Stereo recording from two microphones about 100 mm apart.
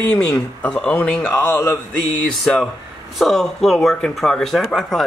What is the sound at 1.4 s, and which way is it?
Mantra, 25° left (ahead or behind).